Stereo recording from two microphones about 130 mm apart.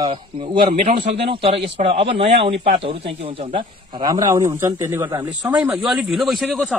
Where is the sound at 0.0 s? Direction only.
40° right (ahead or behind).